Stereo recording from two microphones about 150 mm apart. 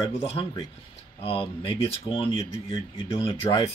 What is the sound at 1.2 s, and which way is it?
Speech, 40° left (ahead or behind).